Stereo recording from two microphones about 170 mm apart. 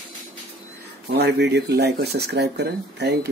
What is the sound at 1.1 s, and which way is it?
Speech, 80° right.